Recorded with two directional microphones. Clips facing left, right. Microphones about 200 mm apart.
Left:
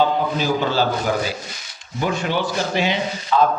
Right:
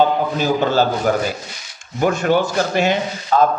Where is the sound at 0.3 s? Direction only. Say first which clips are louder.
Right 5 dB; 45° right (ahead or behind).